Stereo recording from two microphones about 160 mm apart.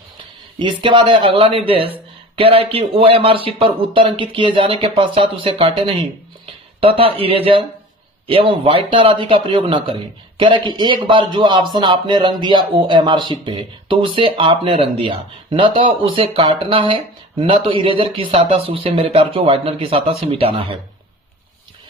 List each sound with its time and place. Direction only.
0.6 s speech: 30° right (ahead or behind)